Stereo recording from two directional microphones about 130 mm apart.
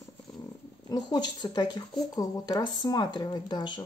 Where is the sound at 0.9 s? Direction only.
35° left (ahead or behind).